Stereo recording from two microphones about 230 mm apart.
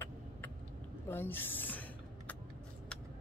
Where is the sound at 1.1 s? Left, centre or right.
Centre.